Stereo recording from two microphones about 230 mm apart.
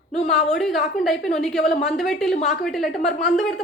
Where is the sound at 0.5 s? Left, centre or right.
Centre.